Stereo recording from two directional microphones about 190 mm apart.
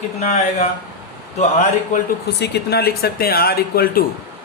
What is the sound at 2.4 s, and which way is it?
Speech, 55° left (ahead or behind).